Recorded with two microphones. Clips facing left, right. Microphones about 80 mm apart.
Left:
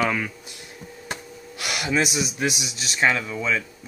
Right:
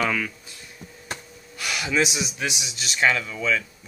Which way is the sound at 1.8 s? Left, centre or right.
Centre.